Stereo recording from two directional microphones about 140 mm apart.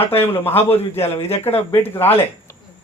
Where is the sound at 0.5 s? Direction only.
45° left (ahead or behind).